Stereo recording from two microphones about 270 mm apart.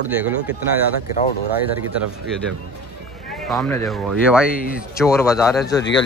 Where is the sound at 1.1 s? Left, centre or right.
Left.